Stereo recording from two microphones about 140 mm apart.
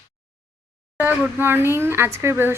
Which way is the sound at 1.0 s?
15° right (ahead or behind).